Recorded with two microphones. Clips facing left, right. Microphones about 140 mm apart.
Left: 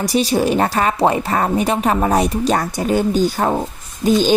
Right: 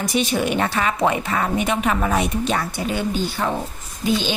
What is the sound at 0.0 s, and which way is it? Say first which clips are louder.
A woman's voice: left 5 dB; 35° left (ahead or behind).